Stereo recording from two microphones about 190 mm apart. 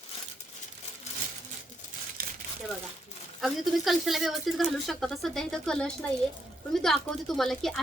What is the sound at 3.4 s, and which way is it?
A woman's voice, centre (ahead or behind).